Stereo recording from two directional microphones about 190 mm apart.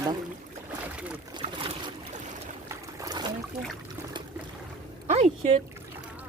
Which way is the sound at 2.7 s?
20° right (ahead or behind).